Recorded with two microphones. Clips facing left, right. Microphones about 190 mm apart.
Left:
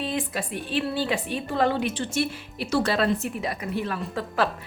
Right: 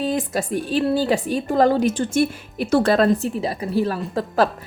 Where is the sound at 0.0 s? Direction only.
40° right (ahead or behind).